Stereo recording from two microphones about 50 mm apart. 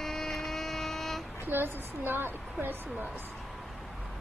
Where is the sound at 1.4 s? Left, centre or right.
Right.